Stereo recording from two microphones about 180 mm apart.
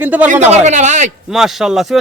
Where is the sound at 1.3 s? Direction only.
Centre (ahead or behind).